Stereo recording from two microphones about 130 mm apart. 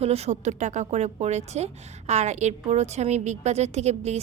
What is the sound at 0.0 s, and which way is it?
A woman's voice, 55° right (ahead or behind).